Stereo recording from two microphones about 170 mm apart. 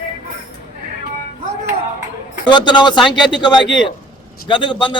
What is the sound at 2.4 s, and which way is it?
A man's voice, 25° left (ahead or behind).